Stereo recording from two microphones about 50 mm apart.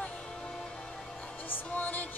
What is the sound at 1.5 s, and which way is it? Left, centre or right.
Music, left.